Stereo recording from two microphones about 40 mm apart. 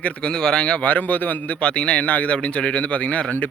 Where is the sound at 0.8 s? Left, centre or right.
Left.